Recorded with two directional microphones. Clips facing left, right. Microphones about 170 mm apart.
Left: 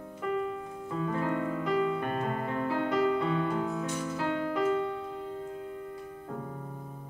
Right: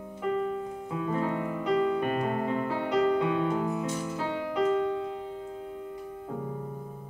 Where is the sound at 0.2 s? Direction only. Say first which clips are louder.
Right 3 dB; 15° right (ahead or behind).